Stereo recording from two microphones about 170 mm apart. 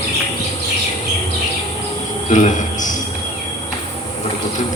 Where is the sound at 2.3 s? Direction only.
45° left (ahead or behind).